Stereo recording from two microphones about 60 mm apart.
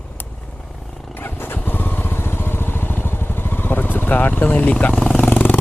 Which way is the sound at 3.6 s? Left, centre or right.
Left.